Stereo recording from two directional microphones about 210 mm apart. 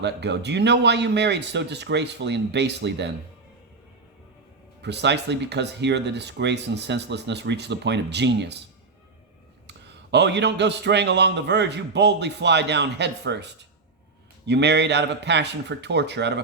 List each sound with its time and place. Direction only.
0.0 s a man's voice: 55° right (ahead or behind)
4.8 s a man's voice: 55° right (ahead or behind)
9.6 s a man's voice: 55° right (ahead or behind)